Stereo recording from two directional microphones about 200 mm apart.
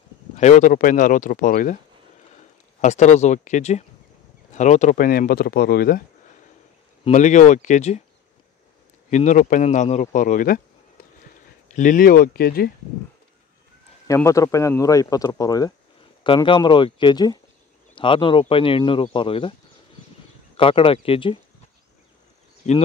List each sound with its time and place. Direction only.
0.4 s speech: 35° left (ahead or behind)
2.8 s speech: 35° left (ahead or behind)
7.1 s speech: 35° left (ahead or behind)
9.1 s speech: 40° left (ahead or behind)
11.7 s speech: 40° left (ahead or behind)
14.0 s speech: 15° left (ahead or behind)
20.5 s speech: 25° left (ahead or behind)
22.7 s speech: 35° left (ahead or behind)